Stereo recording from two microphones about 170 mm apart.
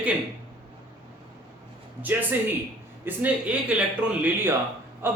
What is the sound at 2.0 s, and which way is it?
Speech, 10° right (ahead or behind).